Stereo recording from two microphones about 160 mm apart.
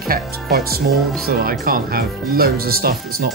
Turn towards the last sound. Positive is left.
turn(degrees=-70)  # may be behind; listen again after turning